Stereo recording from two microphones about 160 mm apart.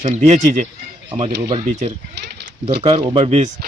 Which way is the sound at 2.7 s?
35° right (ahead or behind).